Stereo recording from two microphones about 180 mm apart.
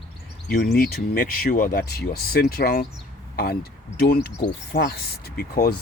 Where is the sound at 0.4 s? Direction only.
60° left (ahead or behind).